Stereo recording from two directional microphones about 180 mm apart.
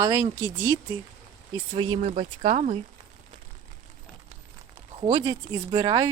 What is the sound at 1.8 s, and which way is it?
Speech, 30° right (ahead or behind).